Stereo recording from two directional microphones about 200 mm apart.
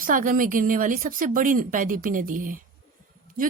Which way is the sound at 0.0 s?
45° right (ahead or behind).